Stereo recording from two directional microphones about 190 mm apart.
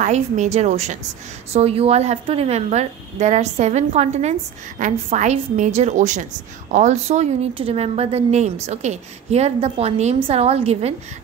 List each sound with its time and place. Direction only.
0.0 s a woman's voice: 40° right (ahead or behind)